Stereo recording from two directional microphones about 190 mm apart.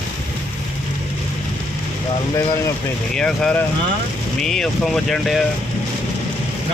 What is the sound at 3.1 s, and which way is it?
Speech, 5° left (ahead or behind).